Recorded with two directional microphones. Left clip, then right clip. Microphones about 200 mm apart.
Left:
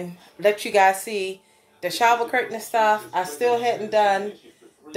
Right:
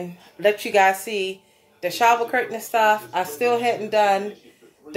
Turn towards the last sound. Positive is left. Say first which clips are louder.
# right 1 dB
turn(degrees=-15)  # may be behind; listen again after turning